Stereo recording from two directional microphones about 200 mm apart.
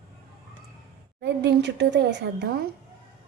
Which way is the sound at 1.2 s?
60° right (ahead or behind).